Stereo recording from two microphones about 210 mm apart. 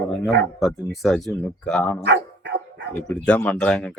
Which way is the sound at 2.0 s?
55° right (ahead or behind).